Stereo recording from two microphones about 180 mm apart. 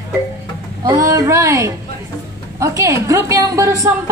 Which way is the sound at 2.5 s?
20° right (ahead or behind).